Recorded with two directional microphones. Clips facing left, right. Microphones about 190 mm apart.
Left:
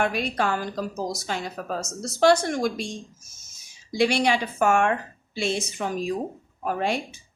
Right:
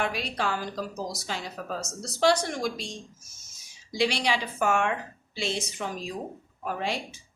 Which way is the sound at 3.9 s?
50° left (ahead or behind).